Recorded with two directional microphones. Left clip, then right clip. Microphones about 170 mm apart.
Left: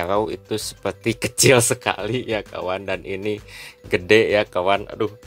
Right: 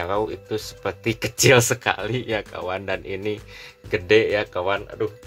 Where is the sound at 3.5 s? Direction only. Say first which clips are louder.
Left 3 dB; 40° left (ahead or behind).